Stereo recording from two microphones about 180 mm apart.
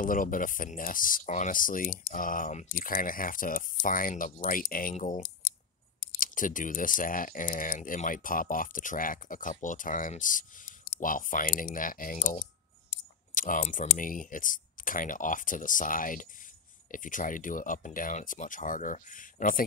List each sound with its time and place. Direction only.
0.0 s speech: 50° left (ahead or behind)